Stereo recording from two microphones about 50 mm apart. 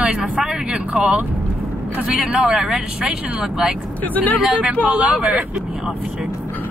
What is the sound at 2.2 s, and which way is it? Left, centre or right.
Speech, right.